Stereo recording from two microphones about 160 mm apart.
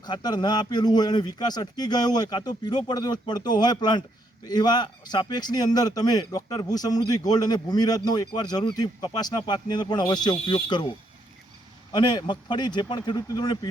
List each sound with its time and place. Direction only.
0.0 s speech: 25° left (ahead or behind)
11.9 s speech: 25° left (ahead or behind)